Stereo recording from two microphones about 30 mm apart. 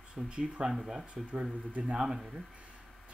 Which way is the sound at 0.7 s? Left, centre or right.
Centre.